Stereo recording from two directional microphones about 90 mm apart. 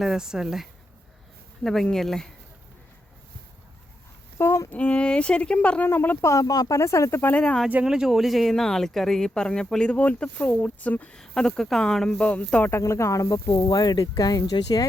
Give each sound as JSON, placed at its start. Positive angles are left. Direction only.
{"t": 0.0, "sound": "speech", "side_deg": -5}
{"t": 4.4, "sound": "a sound", "side_deg": 30}
{"t": 4.7, "sound": "speech", "side_deg": 15}
{"t": 6.3, "sound": "speech", "side_deg": 40}
{"t": 7.9, "sound": "speech", "side_deg": -5}
{"t": 12.2, "sound": "speech", "side_deg": 15}
{"t": 12.7, "sound": "speech", "side_deg": 35}